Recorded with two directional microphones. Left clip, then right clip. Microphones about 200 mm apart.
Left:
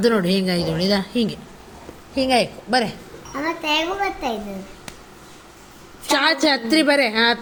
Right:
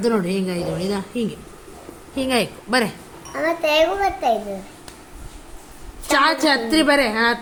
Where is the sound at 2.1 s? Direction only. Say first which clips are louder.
Left 3 dB; 10° right (ahead or behind).